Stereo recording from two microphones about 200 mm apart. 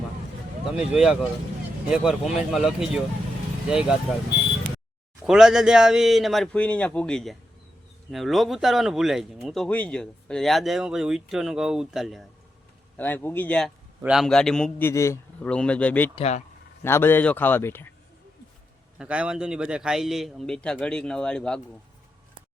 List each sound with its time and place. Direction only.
0.8 s speech: 5° right (ahead or behind)
5.2 s speech: 5° right (ahead or behind)
13.0 s a man's voice: 10° left (ahead or behind)
16.1 s speech: 30° left (ahead or behind)
16.8 s a man's voice: 10° left (ahead or behind)
18.9 s speech: 5° right (ahead or behind)